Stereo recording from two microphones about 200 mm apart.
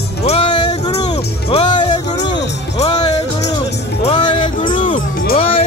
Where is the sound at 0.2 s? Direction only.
30° left (ahead or behind).